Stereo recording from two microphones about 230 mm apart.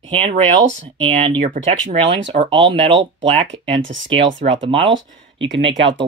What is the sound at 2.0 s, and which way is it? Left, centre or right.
Speech, right.